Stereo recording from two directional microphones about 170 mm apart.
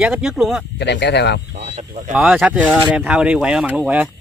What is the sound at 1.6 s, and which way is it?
Speech, 45° right (ahead or behind).